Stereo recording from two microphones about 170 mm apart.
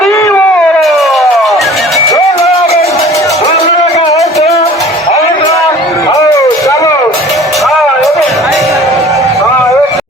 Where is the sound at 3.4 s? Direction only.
35° left (ahead or behind).